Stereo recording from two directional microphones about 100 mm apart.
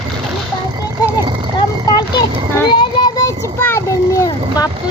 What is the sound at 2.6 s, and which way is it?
Child singing, 50° left (ahead or behind).